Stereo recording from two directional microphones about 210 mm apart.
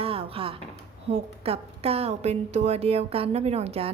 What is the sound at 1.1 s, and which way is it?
A woman's voice, 30° right (ahead or behind).